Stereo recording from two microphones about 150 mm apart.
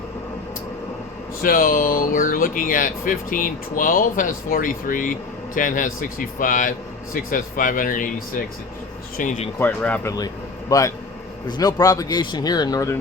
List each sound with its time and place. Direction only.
1.4 s a man's voice: 75° left (ahead or behind)
9.1 s a man's voice: 60° left (ahead or behind)
9.6 s speech: 10° left (ahead or behind)
10.7 s a man's voice: 20° left (ahead or behind)